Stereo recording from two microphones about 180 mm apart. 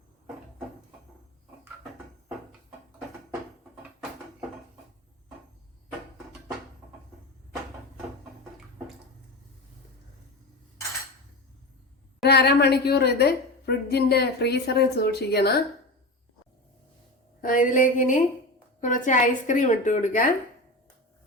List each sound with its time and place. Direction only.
12.2 s a woman's voice: 65° left (ahead or behind)
17.4 s speech: 50° left (ahead or behind)